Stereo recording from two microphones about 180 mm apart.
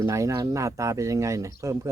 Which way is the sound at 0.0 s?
15° right (ahead or behind).